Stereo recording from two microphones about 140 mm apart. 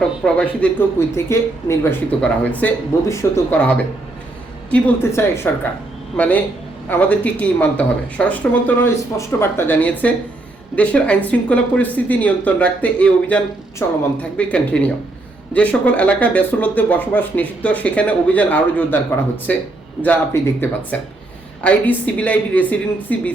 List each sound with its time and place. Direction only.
0.3 s speech: 10° left (ahead or behind)
4.7 s speech: 20° left (ahead or behind)